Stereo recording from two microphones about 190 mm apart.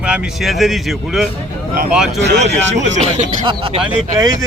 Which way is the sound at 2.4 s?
40° right (ahead or behind).